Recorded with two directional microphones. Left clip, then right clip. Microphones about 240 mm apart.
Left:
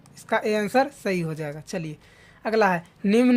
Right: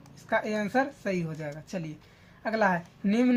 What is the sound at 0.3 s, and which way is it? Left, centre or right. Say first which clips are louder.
Speech: left 5 dB; left.